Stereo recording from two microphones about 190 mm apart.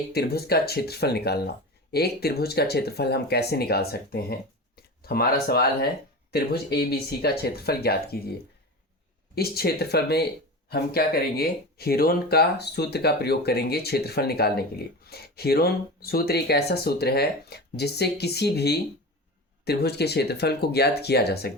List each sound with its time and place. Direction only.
0.1 s speech: 55° left (ahead or behind)